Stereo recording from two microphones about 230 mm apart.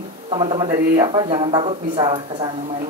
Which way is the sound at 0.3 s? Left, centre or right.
Right.